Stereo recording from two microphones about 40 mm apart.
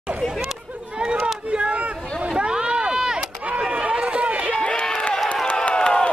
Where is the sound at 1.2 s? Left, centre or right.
Right.